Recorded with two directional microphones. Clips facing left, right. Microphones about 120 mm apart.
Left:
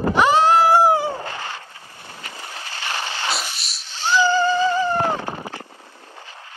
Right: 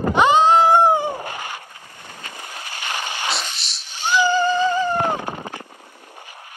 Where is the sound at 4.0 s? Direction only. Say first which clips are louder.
Even; 15° right (ahead or behind).